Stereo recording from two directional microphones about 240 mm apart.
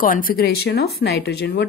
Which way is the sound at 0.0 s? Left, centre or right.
Left.